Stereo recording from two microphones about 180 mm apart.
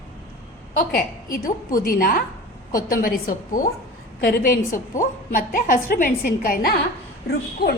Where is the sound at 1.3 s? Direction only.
50° left (ahead or behind).